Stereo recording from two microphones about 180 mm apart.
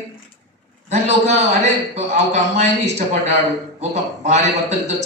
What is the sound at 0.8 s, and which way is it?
Speech, 40° right (ahead or behind).